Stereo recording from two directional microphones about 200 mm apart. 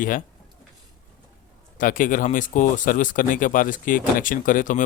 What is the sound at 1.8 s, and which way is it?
Speech, 40° left (ahead or behind).